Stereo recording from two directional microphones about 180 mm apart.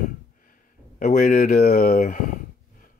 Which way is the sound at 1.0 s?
50° left (ahead or behind).